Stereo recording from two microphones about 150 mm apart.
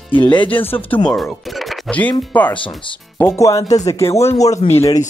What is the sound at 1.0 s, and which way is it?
Speech, 5° left (ahead or behind).